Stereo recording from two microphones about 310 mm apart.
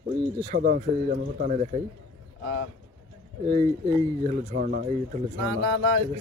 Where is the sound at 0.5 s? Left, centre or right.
Right.